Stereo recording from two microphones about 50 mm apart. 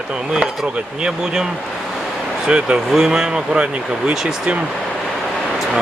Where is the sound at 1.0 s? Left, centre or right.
Centre.